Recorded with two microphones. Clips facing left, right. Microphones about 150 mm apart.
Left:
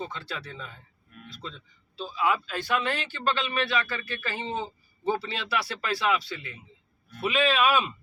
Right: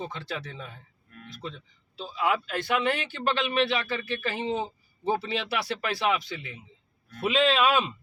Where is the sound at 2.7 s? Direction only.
20° right (ahead or behind).